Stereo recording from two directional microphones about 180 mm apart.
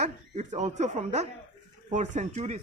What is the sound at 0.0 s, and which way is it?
Speech, 40° right (ahead or behind).